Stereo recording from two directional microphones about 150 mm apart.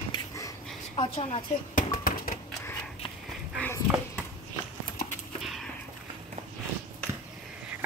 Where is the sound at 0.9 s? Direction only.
40° left (ahead or behind).